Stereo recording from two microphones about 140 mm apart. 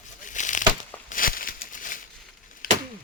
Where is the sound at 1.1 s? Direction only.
85° left.